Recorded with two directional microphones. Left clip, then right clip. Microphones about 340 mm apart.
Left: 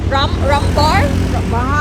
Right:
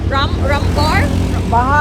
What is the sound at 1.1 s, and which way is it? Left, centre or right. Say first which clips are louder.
Speech: right 3 dB; right.